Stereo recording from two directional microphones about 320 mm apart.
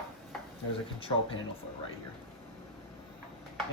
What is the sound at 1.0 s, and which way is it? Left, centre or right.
Speech, centre.